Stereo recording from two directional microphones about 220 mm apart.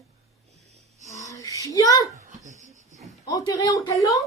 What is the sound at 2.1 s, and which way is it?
Babbling, 35° right (ahead or behind).